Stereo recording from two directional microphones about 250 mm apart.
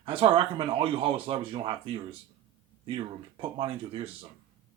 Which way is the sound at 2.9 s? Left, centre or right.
Right.